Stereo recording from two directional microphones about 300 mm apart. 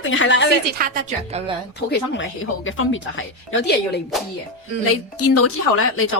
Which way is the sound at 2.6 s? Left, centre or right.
Left.